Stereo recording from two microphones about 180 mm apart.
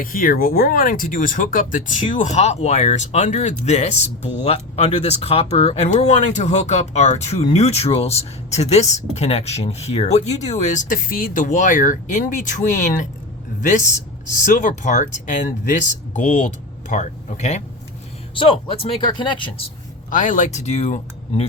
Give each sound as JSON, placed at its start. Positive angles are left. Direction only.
{"t": 0.0, "sound": "a man's voice", "side_deg": 50}
{"t": 20.1, "sound": "speech", "side_deg": 45}